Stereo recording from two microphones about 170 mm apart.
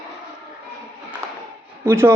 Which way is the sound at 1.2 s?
15° right (ahead or behind).